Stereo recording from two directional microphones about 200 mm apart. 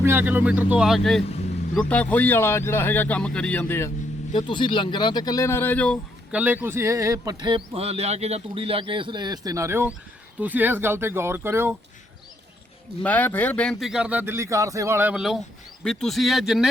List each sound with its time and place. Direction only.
0.0 s speech: 10° right (ahead or behind); by 3.9 s 10° left (ahead or behind)
4.4 s speech: 25° left (ahead or behind); by 6.0 s 5° left (ahead or behind)
6.3 s speech: 10° right (ahead or behind)
13.0 s a man's voice: 10° left (ahead or behind)